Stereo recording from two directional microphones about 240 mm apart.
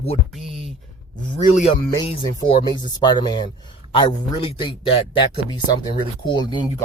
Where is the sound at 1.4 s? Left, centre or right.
Left.